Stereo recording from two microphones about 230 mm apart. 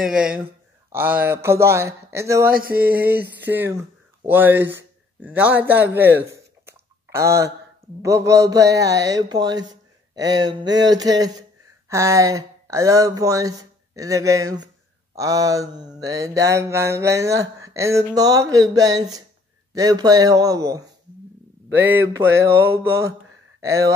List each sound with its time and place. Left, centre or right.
0.0 s speech: centre
2.5 s a sound: right
2.9 s a man's voice: centre